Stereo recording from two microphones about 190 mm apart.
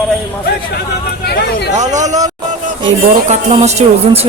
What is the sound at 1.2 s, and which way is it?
Speech, 60° left (ahead or behind).